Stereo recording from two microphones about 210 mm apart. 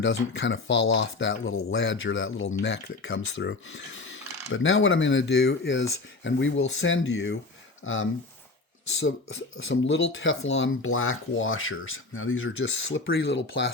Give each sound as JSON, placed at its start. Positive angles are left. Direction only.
{"t": 0.0, "sound": "speech", "side_deg": 60}
{"t": 7.9, "sound": "speech", "side_deg": 70}